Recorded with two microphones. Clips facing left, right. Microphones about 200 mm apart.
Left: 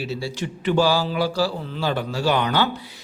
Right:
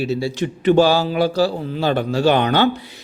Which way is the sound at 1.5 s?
50° right (ahead or behind).